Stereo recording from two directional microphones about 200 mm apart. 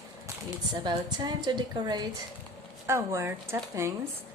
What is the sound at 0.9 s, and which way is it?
A woman's voice, 20° right (ahead or behind).